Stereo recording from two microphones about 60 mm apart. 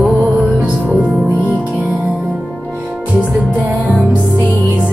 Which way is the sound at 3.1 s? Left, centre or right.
Centre.